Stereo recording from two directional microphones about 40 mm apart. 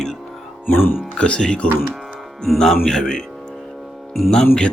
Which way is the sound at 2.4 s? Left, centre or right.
Centre.